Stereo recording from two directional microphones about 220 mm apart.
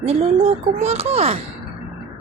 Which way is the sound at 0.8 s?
30° right (ahead or behind).